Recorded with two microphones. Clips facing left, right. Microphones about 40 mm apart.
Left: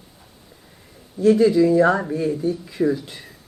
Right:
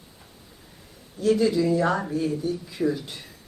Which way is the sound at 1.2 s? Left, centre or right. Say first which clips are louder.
Left 6 dB; left.